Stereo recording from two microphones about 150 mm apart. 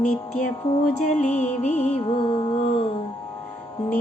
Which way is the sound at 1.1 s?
50° left (ahead or behind).